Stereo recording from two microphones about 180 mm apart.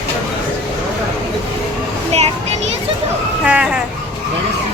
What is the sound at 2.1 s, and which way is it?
Children playing, 35° right (ahead or behind).